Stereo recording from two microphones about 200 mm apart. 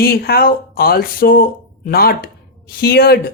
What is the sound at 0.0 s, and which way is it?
Speech, 50° left (ahead or behind).